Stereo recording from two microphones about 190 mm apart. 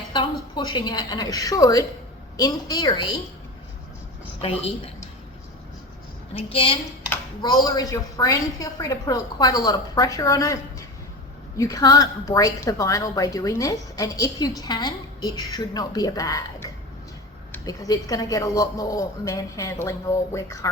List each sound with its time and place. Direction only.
0.1 s a woman's voice: 25° left (ahead or behind)
4.4 s a woman's voice: 30° left (ahead or behind)
6.3 s a woman's voice: 30° left (ahead or behind)
7.1 s a woman's voice: 20° left (ahead or behind)